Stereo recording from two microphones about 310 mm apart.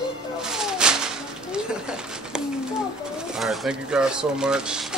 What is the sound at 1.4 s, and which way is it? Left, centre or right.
Speech, centre.